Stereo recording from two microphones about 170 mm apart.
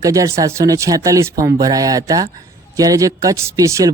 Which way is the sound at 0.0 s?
20° right (ahead or behind).